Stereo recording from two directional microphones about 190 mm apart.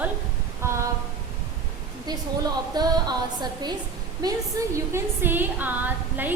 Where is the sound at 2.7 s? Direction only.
20° right (ahead or behind).